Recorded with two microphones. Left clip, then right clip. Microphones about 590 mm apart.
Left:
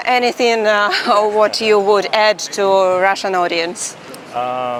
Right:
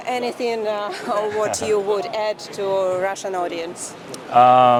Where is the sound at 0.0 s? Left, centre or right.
Left.